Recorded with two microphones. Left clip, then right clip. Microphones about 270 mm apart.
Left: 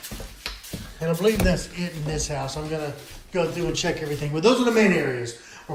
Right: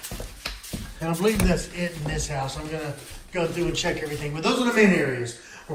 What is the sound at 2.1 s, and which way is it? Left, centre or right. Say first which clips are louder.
A man's voice: left 1 dB; centre.